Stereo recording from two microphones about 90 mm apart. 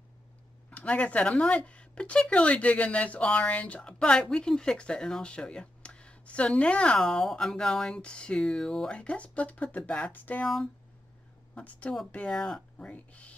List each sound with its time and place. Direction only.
0.7 s speech: 15° left (ahead or behind)
10.4 s speech: 5° left (ahead or behind)
11.5 s speech: 15° left (ahead or behind)